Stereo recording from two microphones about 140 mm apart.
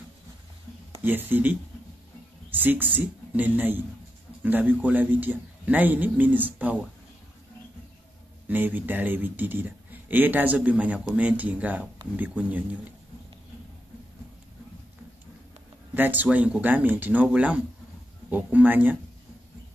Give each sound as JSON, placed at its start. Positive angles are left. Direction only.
{"t": 1.0, "sound": "a man's voice", "side_deg": -15}
{"t": 8.5, "sound": "a man's voice", "side_deg": -15}
{"t": 15.9, "sound": "a man's voice", "side_deg": -15}